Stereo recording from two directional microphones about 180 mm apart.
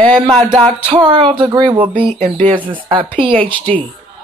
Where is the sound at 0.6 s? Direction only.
30° right (ahead or behind).